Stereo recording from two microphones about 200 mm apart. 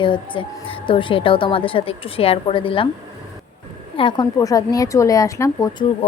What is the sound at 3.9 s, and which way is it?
A woman's voice, 25° left (ahead or behind).